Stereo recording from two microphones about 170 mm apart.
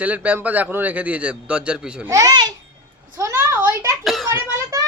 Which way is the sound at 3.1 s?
15° right (ahead or behind).